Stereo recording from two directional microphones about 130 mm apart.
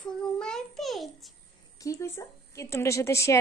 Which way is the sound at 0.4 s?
5° left (ahead or behind).